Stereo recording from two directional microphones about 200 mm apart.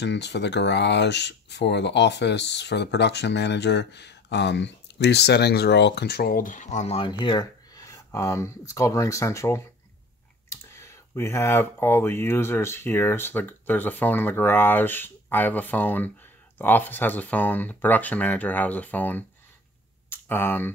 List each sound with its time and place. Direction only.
0.0 s speech: 60° left (ahead or behind); by 20.7 s 10° left (ahead or behind)